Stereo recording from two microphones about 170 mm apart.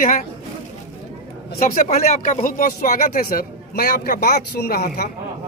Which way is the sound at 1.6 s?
55° left (ahead or behind).